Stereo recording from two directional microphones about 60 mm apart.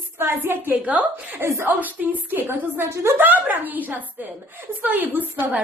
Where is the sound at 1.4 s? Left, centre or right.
Right.